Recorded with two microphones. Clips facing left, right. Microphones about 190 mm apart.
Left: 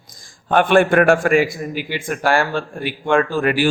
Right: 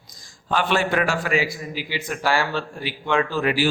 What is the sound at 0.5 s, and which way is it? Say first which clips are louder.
A man's voice: left 8 dB; 55° left (ahead or behind).